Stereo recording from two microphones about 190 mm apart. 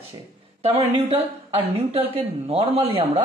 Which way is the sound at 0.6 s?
30° right (ahead or behind).